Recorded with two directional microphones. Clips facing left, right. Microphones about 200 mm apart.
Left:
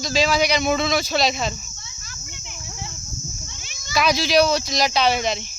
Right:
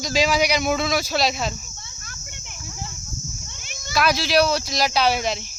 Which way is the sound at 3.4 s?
55° right (ahead or behind).